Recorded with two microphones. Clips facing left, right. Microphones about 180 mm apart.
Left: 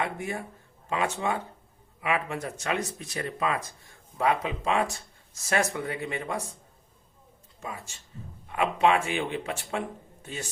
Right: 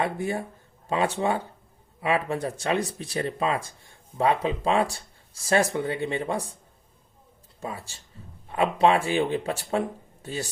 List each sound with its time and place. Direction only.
0.0 s speech: 35° right (ahead or behind)
7.6 s speech: 35° right (ahead or behind)